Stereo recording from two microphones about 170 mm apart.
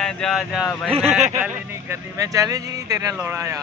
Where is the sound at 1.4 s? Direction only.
15° right (ahead or behind).